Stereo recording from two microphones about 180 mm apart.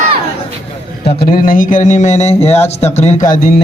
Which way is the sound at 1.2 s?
50° left (ahead or behind).